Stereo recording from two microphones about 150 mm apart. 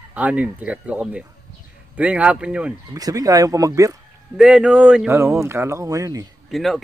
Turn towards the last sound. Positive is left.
turn(degrees=0)  # may be behind; listen again after turning